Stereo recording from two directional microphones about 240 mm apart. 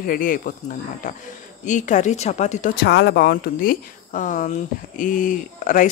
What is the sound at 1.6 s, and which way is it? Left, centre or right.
Speech, left.